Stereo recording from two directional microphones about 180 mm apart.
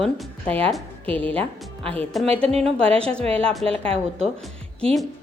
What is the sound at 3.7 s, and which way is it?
Speech, 30° right (ahead or behind).